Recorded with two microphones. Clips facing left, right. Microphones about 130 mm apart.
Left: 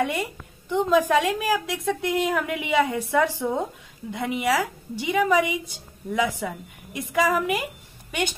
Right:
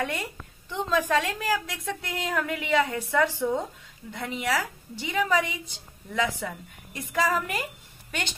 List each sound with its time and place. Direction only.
0.0 s a woman's voice: 15° left (ahead or behind)